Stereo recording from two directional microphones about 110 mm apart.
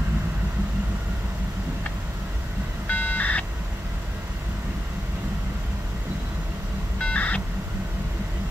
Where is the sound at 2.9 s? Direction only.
15° left (ahead or behind).